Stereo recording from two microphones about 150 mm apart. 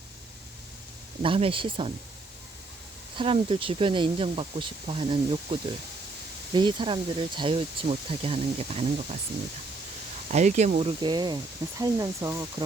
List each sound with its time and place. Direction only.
1.2 s speech: 35° right (ahead or behind)
3.2 s speech: 40° right (ahead or behind)
10.3 s speech: 50° right (ahead or behind)
11.0 s speech: 30° right (ahead or behind)